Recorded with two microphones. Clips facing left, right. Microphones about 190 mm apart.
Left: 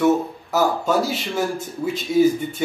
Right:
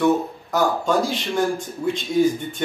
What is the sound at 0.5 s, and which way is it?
A man's voice, 5° left (ahead or behind).